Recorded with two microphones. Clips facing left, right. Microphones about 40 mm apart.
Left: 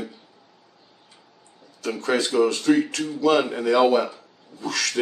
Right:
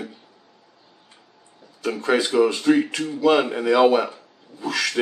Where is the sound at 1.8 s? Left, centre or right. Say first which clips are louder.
Right 2 dB; centre.